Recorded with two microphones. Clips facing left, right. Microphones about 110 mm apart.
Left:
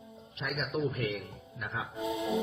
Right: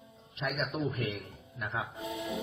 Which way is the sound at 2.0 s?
20° left (ahead or behind).